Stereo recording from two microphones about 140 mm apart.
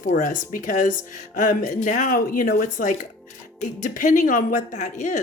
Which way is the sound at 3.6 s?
65° left (ahead or behind).